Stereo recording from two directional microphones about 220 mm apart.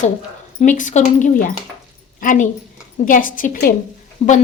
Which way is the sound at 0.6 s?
35° left (ahead or behind).